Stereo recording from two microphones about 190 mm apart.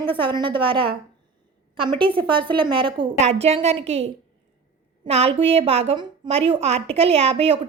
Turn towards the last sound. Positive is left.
turn(degrees=-30)  # may be behind; listen again after turning